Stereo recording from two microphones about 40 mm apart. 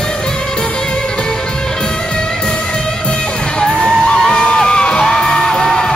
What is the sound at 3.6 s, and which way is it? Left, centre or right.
Music, centre.